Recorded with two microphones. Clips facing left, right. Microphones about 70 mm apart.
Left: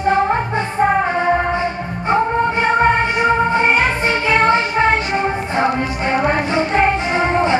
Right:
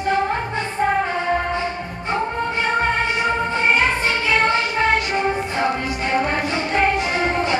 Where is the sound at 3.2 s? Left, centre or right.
Left.